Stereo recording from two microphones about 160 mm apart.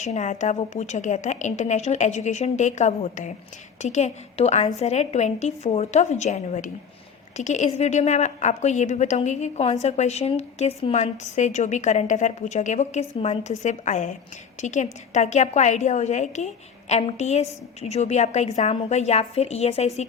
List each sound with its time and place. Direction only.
0.0 s a woman's voice: 45° left (ahead or behind)